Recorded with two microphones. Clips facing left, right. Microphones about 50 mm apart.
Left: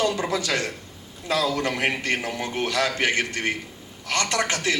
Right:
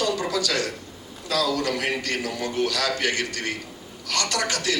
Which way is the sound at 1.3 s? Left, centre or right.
Left.